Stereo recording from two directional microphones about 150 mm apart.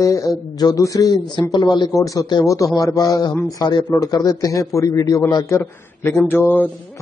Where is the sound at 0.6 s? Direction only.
25° left (ahead or behind).